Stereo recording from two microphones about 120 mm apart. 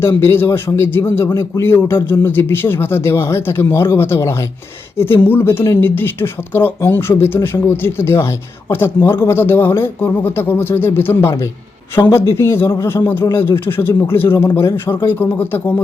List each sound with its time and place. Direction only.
0.0 s a man's voice: 20° left (ahead or behind)